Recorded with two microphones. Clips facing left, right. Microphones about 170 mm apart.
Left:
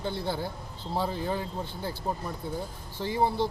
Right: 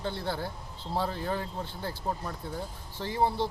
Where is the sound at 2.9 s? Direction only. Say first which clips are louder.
Left 1 dB; 10° left (ahead or behind).